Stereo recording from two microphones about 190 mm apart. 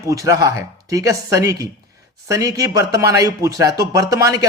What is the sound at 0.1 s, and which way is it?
Speech, 15° right (ahead or behind).